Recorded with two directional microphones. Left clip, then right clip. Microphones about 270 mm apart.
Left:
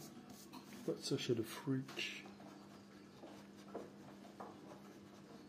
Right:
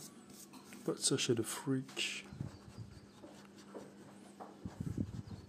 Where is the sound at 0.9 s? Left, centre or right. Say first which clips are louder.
Right 6 dB; right.